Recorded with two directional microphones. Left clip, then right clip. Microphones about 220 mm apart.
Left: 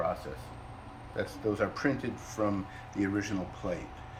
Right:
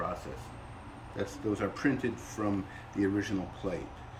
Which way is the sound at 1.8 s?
Centre (ahead or behind).